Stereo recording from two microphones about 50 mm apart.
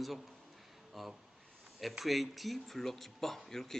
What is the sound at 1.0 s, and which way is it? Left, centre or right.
A man's voice, centre.